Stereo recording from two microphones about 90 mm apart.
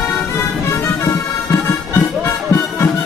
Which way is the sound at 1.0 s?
30° left (ahead or behind).